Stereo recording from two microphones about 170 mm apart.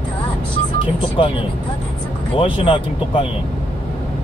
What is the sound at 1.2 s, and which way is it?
Speech, 30° left (ahead or behind).